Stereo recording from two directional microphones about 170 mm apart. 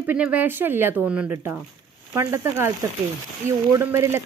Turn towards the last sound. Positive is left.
turn(degrees=-15)  # may be behind; listen again after turning